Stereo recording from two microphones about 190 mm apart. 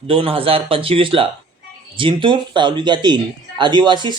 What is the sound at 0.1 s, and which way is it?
Speech, 30° right (ahead or behind).